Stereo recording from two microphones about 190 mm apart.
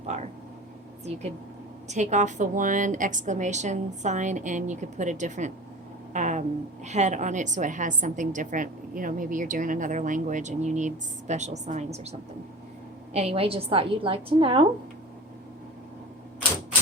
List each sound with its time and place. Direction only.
0.0 s speech: 35° right (ahead or behind)
1.9 s a woman's voice: 40° right (ahead or behind)
13.1 s a woman's voice: 30° right (ahead or behind)